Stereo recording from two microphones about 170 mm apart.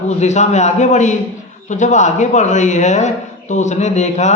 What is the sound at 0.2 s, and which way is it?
Speech, 40° left (ahead or behind).